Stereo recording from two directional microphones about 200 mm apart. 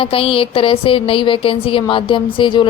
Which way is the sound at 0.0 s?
25° left (ahead or behind).